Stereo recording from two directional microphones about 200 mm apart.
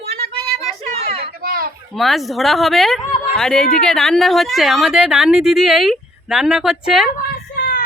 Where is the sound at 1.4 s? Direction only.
50° right (ahead or behind).